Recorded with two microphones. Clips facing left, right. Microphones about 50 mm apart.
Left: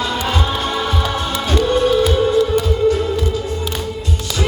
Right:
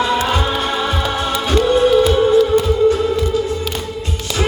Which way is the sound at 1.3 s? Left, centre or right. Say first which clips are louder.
Right 3 dB; right.